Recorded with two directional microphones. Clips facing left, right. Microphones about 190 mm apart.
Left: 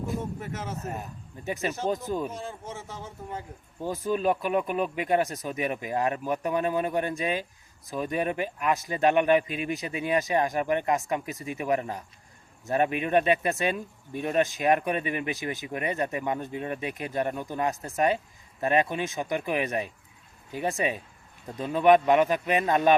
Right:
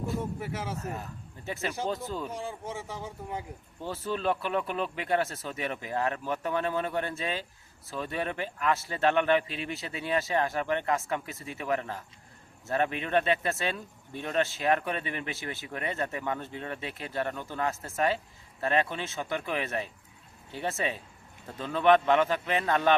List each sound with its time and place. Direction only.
0.3 s a man's voice: 10° right (ahead or behind)
0.8 s speech: 15° left (ahead or behind)
2.3 s a man's voice: 10° right (ahead or behind)
3.8 s speech: 15° left (ahead or behind)